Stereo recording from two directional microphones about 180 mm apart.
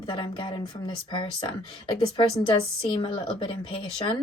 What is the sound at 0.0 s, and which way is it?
Speech, 30° left (ahead or behind).